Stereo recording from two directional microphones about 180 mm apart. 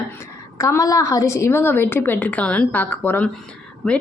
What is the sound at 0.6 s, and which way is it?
A woman's voice, 15° left (ahead or behind).